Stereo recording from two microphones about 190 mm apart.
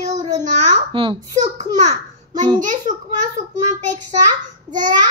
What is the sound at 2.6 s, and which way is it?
Speech, 40° right (ahead or behind).